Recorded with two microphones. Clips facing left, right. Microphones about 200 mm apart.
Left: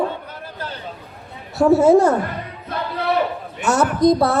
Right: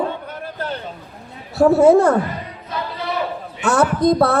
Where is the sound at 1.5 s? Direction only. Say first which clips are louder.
Right 1 dB; 55° right (ahead or behind).